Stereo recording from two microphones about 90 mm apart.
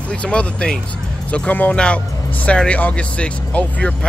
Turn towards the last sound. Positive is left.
turn(degrees=15)  # may be behind; listen again after turning